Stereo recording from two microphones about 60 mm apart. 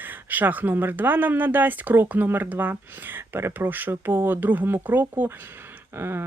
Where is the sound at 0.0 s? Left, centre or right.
Right.